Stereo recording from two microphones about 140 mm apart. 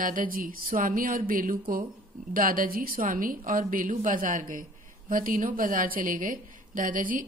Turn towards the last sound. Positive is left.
turn(degrees=-75)  # may be behind; listen again after turning